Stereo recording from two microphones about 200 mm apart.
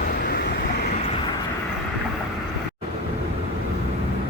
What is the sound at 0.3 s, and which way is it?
Vehicle, 55° left (ahead or behind).